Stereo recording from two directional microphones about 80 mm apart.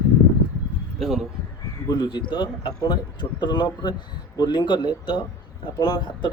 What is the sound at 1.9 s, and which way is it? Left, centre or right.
Speech, left.